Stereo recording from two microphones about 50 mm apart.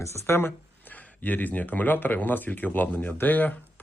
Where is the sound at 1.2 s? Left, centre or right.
Left.